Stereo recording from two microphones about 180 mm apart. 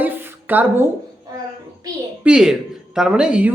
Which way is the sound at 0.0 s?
10° right (ahead or behind).